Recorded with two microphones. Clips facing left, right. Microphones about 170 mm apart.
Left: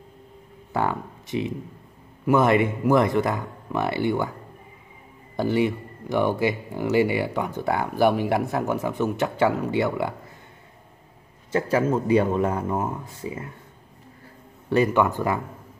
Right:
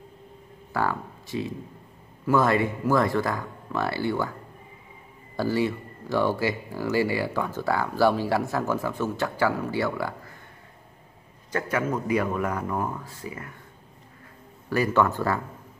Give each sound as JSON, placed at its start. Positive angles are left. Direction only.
{"t": 0.7, "sound": "speech", "side_deg": 20}
{"t": 5.3, "sound": "speech", "side_deg": 20}
{"t": 11.5, "sound": "speech", "side_deg": 25}
{"t": 14.7, "sound": "speech", "side_deg": 20}